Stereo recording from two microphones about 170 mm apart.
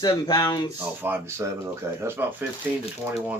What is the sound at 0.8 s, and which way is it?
Speech, 10° right (ahead or behind).